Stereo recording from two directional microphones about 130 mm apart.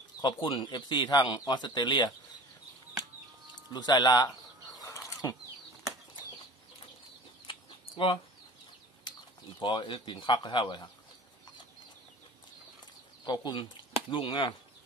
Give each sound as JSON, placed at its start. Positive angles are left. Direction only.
{"t": 0.2, "sound": "speech", "side_deg": 35}
{"t": 3.7, "sound": "speech", "side_deg": 30}
{"t": 4.8, "sound": "pulleys", "side_deg": 25}
{"t": 7.4, "sound": "chicken", "side_deg": 40}
{"t": 9.6, "sound": "speech", "side_deg": 40}
{"t": 13.2, "sound": "speech", "side_deg": 35}